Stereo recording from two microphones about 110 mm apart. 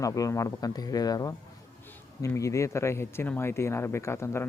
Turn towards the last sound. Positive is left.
turn(degrees=25)  # may be behind; listen again after turning